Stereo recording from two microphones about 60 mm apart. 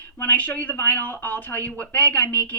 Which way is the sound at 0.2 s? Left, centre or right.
Left.